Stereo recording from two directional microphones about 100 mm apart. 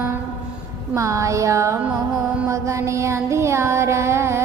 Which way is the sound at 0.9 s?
30° right (ahead or behind).